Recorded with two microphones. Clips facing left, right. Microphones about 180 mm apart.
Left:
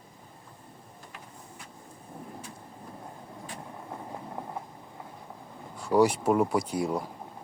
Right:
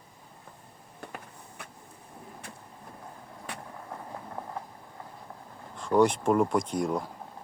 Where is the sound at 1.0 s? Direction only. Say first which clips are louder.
Right 7 dB; 60° right (ahead or behind).